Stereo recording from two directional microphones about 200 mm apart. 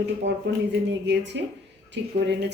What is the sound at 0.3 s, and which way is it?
Speech, 60° right (ahead or behind).